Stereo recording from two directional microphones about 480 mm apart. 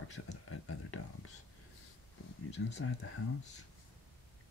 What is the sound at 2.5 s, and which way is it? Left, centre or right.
Speech, left.